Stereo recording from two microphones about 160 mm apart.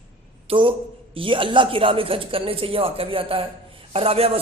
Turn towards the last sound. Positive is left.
turn(degrees=-35)  # may be behind; listen again after turning